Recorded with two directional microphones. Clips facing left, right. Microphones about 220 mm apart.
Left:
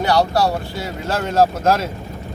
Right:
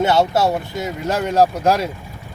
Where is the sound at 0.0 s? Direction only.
25° right (ahead or behind).